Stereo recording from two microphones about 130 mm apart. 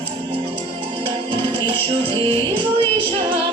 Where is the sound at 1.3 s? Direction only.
35° right (ahead or behind).